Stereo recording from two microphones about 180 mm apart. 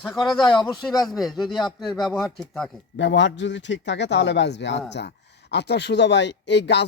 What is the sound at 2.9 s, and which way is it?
Speech, 80° left.